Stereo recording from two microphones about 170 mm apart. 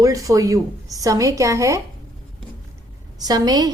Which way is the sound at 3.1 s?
20° right (ahead or behind).